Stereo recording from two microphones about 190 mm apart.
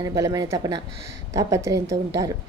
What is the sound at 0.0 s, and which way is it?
Speech, 20° right (ahead or behind).